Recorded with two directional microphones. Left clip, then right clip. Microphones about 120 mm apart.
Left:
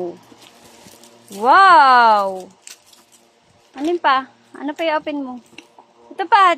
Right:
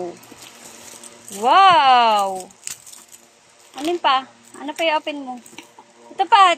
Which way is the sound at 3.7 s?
65° left (ahead or behind).